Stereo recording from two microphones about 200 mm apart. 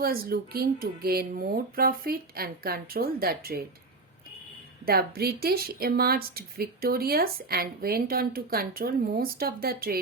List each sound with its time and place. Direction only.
0.0 s a woman's voice: 50° right (ahead or behind)
4.9 s a woman's voice: 50° right (ahead or behind)